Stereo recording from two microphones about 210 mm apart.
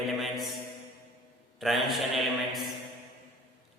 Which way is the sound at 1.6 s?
Centre (ahead or behind).